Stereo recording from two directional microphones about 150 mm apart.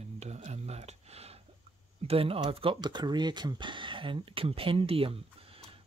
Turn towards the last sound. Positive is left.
turn(degrees=-40)  # may be behind; listen again after turning